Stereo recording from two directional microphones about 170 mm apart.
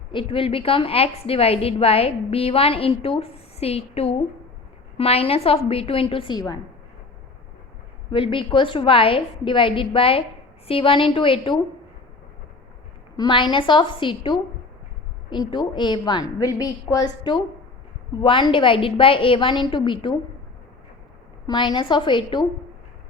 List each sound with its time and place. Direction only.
0.1 s a woman's voice: 30° left (ahead or behind)
8.1 s a woman's voice: 30° left (ahead or behind)
13.1 s a woman's voice: 25° left (ahead or behind)
21.4 s a woman's voice: 25° left (ahead or behind)